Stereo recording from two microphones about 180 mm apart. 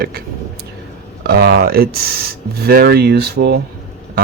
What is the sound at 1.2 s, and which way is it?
Speech, 60° right (ahead or behind).